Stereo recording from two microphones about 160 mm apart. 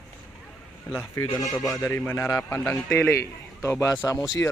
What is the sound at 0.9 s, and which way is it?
A man's voice, 15° left (ahead or behind).